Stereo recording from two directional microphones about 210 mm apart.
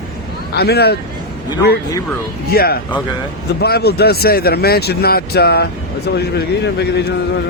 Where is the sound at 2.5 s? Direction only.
45° left (ahead or behind).